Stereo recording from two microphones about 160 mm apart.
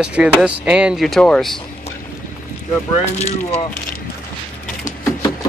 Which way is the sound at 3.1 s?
45° left (ahead or behind).